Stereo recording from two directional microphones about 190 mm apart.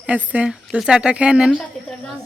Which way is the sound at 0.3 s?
5° right (ahead or behind).